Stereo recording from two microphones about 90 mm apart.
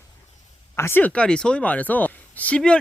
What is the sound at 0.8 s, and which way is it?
Speech, 25° left (ahead or behind).